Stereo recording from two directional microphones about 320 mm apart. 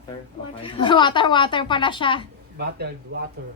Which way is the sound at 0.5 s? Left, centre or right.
Centre.